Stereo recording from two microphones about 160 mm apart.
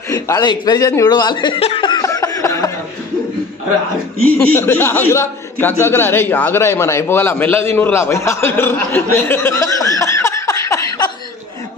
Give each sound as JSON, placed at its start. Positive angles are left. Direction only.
{"t": 0.1, "sound": "speech", "side_deg": 25}
{"t": 4.6, "sound": "a man's voice", "side_deg": 15}